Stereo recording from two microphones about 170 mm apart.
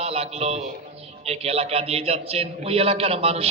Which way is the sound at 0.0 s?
35° right (ahead or behind).